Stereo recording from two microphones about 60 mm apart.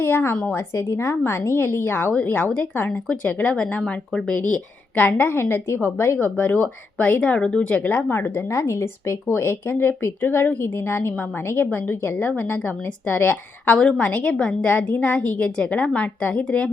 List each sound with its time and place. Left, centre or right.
0.0 s speech: left
0.7 s a woman's voice: left
5.1 s a woman's voice: left
6.2 s speech: left
7.2 s a woman's voice: centre
8.4 s speech: left
10.6 s a woman's voice: left; by 16.7 s centre